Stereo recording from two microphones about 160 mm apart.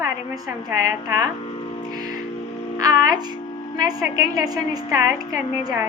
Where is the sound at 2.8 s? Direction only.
25° right (ahead or behind).